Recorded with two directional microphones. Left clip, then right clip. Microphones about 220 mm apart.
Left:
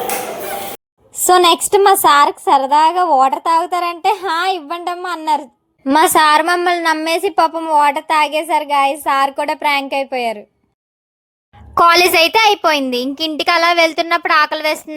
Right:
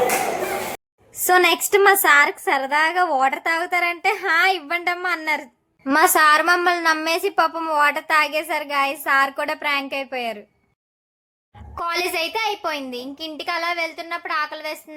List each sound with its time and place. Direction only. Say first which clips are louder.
1.1 s speech: left 6 dB; 20° left (ahead or behind)
11.7 s a woman's voice: left 14 dB; 50° left (ahead or behind)